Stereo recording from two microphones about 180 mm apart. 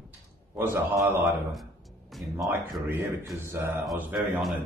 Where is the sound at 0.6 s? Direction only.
15° right (ahead or behind).